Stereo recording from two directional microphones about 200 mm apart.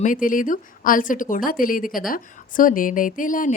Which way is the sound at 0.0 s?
40° left (ahead or behind).